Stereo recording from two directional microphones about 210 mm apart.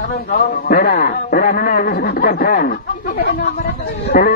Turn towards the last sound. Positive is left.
turn(degrees=45)  # may be behind; listen again after turning